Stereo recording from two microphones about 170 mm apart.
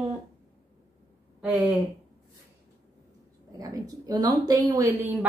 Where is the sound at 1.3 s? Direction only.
10° right (ahead or behind).